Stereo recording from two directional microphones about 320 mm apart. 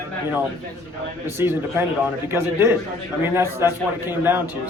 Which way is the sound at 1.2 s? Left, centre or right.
Centre.